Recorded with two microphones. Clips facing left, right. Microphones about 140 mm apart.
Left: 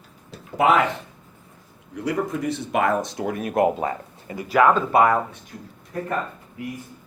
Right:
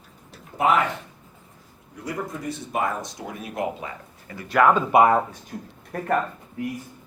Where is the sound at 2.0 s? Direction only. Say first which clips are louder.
Left 6 dB; 70° left (ahead or behind); by 3.9 s 50° left (ahead or behind).